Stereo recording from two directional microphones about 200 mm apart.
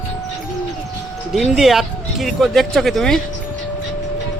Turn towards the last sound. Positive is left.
turn(degrees=0)  # may be behind; listen again after turning